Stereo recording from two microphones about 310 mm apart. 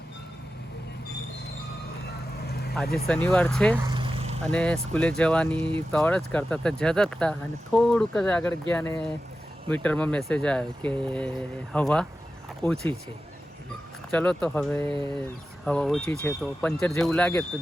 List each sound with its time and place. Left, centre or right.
2.5 s vehicle: left
3.1 s speech: centre
3.8 s vehicle: centre
4.5 s speech: centre
14.1 s speech: centre